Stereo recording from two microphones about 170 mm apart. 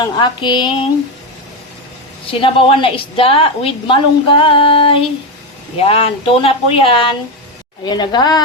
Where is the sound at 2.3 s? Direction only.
30° left (ahead or behind).